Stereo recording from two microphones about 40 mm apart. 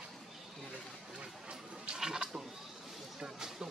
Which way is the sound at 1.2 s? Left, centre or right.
Right.